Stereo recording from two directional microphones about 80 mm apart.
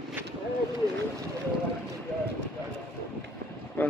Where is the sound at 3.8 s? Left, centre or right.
Left.